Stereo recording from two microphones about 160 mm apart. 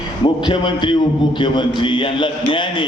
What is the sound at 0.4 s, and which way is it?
A man's voice, 30° left (ahead or behind).